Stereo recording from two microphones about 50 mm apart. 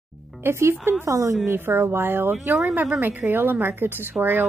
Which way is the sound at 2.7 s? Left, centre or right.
Right.